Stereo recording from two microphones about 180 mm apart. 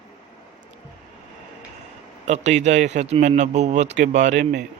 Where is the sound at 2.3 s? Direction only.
40° right (ahead or behind).